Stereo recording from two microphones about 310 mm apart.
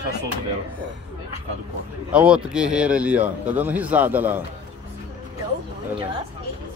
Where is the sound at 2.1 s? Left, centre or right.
Centre.